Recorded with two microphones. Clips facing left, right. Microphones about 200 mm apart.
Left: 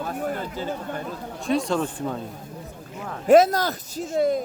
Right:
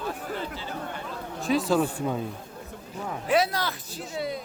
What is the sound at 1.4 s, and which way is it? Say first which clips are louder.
Speech: even; centre (ahead or behind).